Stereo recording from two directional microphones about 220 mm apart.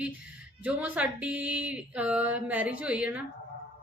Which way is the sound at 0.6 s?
5° right (ahead or behind).